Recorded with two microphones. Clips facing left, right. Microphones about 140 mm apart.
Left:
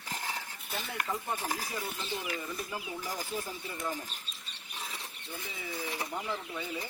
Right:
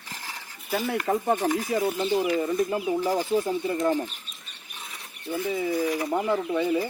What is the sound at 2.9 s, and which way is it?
Speech, 75° right (ahead or behind).